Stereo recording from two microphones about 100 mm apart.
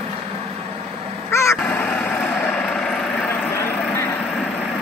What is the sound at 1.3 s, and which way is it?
Crow, 30° left (ahead or behind).